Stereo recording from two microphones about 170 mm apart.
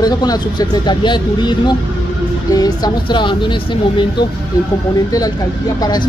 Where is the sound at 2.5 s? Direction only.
20° left (ahead or behind).